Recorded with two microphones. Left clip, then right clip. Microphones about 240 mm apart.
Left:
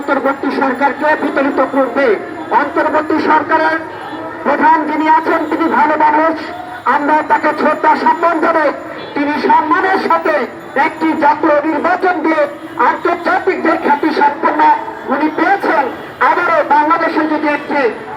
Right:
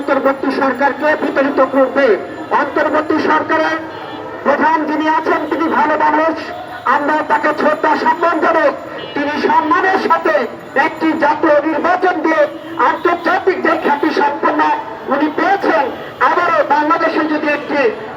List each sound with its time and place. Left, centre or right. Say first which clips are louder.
0.1 s speech: even; right